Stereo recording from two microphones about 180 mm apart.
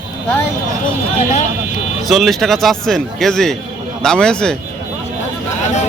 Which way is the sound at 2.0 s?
Centre (ahead or behind).